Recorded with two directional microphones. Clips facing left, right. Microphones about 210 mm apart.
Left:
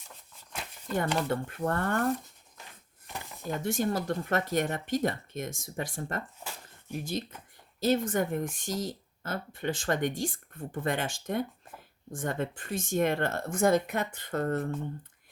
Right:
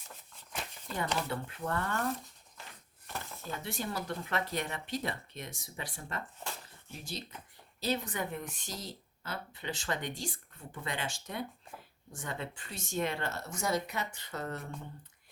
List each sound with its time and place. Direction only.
0.5 s a sound: centre (ahead or behind)
0.9 s speech: 50° left (ahead or behind)
3.6 s speech: 45° left (ahead or behind)